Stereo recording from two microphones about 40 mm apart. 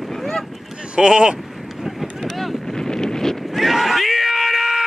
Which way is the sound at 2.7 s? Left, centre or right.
Centre.